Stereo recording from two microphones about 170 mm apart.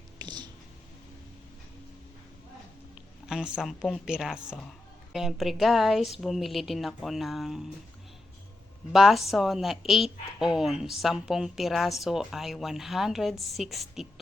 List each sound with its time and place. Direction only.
0.2 s a sound: 25° right (ahead or behind)
2.9 s a woman's voice: 5° right (ahead or behind)
8.9 s a woman's voice: centre (ahead or behind)